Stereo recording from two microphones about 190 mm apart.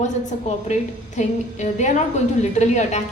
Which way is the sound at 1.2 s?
40° left (ahead or behind).